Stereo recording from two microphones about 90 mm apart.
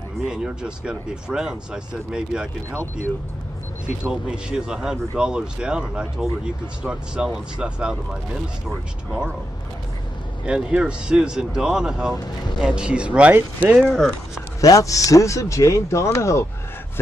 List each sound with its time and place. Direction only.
0.3 s speech: 10° right (ahead or behind)
4.0 s speech: 10° right (ahead or behind)
10.4 s speech: 10° right (ahead or behind)
13.8 s speech: 5° left (ahead or behind)
14.6 s speech: 40° left (ahead or behind)